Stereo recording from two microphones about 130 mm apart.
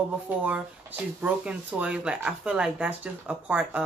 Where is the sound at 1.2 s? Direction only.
10° right (ahead or behind).